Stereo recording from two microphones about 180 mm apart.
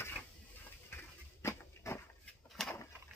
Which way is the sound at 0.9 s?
15° left (ahead or behind).